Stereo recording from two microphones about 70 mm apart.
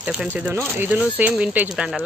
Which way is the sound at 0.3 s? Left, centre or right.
Right.